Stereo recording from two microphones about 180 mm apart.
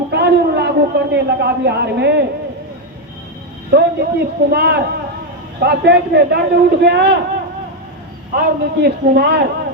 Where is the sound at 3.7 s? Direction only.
60° right (ahead or behind).